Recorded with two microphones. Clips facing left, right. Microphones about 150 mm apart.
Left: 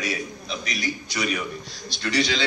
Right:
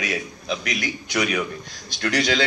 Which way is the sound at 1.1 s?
60° right (ahead or behind).